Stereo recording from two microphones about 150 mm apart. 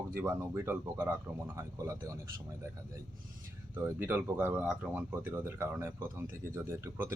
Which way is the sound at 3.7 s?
15° right (ahead or behind).